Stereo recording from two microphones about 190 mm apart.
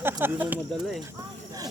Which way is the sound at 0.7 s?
Centre (ahead or behind).